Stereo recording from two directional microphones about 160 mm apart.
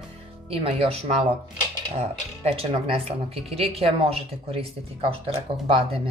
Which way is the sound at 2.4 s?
40° right (ahead or behind).